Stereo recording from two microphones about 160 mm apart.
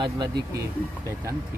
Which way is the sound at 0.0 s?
30° right (ahead or behind).